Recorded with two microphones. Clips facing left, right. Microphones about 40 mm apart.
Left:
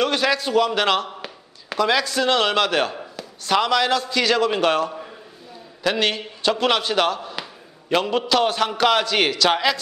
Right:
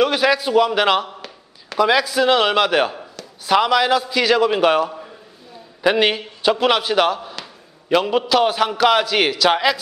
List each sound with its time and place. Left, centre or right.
0.0 s a man's voice: centre
1.0 s a sound: centre
1.8 s a man's voice: centre